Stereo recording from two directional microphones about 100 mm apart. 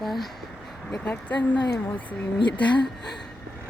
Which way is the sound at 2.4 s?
50° left (ahead or behind).